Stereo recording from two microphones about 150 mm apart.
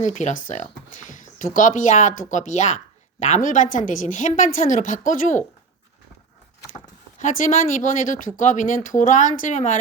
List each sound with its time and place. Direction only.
0.0 s speech: 55° left (ahead or behind)
6.7 s speech: 55° left (ahead or behind)